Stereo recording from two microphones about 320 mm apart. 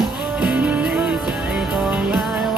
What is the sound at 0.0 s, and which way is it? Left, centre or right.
Music, centre.